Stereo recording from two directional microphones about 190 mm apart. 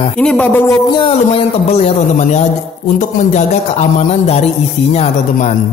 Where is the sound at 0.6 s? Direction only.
25° left (ahead or behind).